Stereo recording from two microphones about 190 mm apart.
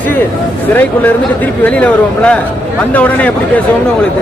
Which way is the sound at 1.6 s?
5° left (ahead or behind).